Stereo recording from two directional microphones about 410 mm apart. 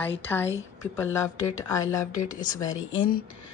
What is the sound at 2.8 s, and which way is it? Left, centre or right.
Speech, left.